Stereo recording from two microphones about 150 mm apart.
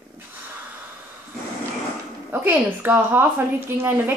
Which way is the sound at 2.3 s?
15° right (ahead or behind).